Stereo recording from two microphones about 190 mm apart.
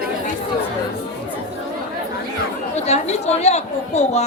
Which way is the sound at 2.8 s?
35° left (ahead or behind).